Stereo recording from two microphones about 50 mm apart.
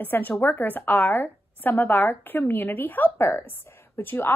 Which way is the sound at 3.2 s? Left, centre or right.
Left.